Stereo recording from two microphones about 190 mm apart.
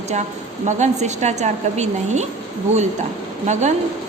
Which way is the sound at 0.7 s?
40° right (ahead or behind).